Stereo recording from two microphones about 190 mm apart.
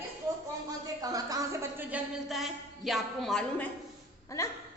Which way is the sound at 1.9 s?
5° right (ahead or behind).